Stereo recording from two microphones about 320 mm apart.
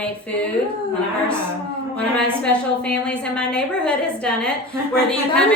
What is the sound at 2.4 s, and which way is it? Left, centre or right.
A woman's voice, centre.